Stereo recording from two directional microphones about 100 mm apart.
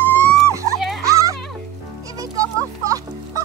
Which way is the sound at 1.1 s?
35° right (ahead or behind).